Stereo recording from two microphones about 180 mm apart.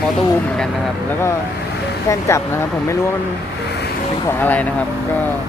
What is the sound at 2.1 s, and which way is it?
Speech, 15° left (ahead or behind).